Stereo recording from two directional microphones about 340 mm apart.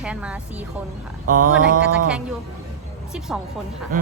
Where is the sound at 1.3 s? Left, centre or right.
Right.